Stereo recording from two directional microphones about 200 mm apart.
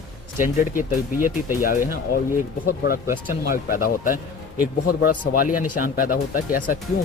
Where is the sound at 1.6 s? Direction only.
45° left (ahead or behind).